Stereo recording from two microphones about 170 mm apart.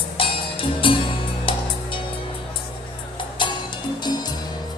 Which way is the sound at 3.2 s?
30° left (ahead or behind).